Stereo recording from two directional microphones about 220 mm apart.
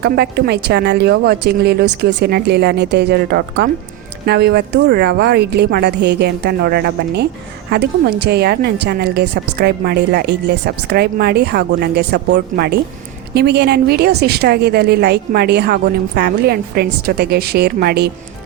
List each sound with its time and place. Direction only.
0.0 s a woman's voice: 45° right (ahead or behind)